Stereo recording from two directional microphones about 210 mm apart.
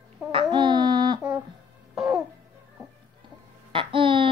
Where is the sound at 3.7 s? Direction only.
25° right (ahead or behind).